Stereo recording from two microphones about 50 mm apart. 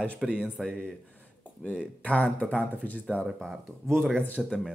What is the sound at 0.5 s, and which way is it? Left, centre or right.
Speech, centre.